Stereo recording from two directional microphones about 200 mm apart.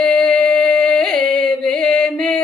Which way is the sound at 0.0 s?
5° left (ahead or behind).